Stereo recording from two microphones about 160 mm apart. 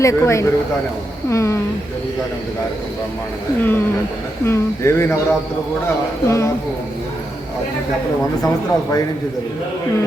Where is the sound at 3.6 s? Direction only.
10° left (ahead or behind).